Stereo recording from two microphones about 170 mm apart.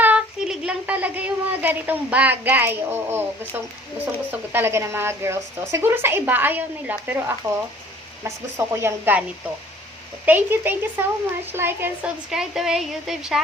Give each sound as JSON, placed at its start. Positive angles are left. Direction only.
{"t": 0.0, "sound": "speech", "side_deg": -5}
{"t": 8.5, "sound": "speech", "side_deg": -15}
{"t": 10.2, "sound": "a woman's voice", "side_deg": -10}